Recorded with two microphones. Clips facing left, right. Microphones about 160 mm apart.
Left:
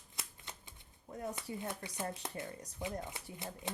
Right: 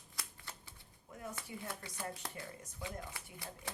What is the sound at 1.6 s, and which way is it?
Speech, 20° left (ahead or behind).